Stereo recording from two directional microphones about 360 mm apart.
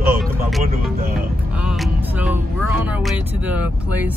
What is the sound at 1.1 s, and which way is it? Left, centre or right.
Music, centre.